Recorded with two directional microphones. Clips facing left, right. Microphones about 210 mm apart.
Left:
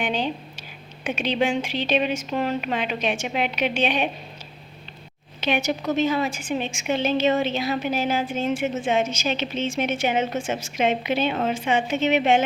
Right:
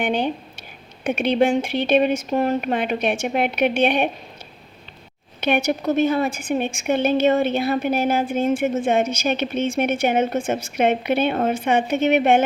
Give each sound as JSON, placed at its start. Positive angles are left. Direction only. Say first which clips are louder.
{"t": 0.0, "sound": "a woman's voice", "louder": "right 4 dB", "side_deg": -55}
{"t": 5.5, "sound": "a woman's voice", "louder": "right 4 dB", "side_deg": -55}